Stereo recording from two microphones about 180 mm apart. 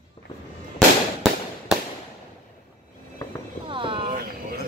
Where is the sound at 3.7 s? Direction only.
30° right (ahead or behind).